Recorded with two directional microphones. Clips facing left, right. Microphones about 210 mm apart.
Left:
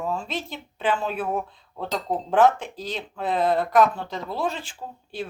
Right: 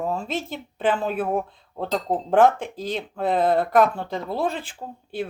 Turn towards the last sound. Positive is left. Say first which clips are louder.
# right 3 dB
turn(degrees=-55)  # may be behind; listen again after turning